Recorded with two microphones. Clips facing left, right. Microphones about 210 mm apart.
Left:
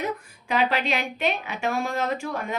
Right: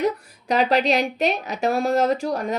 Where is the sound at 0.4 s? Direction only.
40° right (ahead or behind).